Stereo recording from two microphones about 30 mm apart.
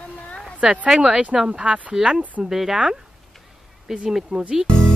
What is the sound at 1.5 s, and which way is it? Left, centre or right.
Speech, right.